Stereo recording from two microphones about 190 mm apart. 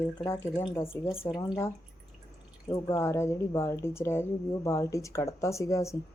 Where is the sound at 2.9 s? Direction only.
15° left (ahead or behind).